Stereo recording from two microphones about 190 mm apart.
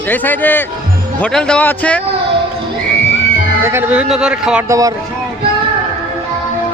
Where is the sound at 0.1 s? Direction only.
10° left (ahead or behind).